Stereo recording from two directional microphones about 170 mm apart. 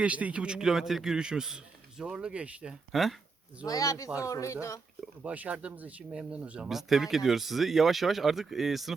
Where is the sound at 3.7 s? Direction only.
20° left (ahead or behind).